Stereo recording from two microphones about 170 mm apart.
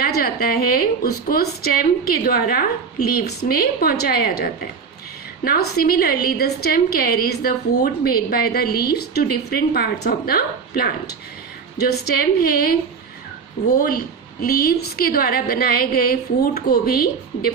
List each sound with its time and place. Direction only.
0.0 s a woman's voice: 65° left (ahead or behind)
13.7 s a woman's voice: 60° left (ahead or behind)